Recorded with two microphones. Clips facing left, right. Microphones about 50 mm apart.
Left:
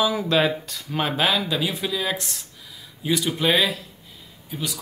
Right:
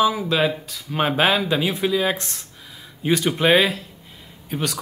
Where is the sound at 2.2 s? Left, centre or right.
Right.